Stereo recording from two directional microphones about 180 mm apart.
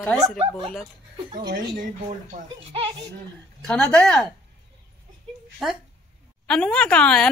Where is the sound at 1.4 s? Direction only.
55° right (ahead or behind).